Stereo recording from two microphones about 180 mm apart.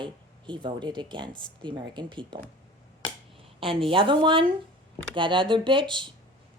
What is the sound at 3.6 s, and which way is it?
A woman's voice, 30° right (ahead or behind).